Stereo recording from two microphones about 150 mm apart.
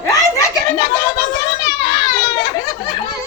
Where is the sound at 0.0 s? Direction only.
20° left (ahead or behind).